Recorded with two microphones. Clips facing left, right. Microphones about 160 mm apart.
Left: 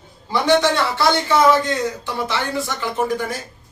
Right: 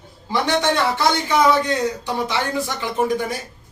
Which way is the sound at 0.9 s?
15° right (ahead or behind).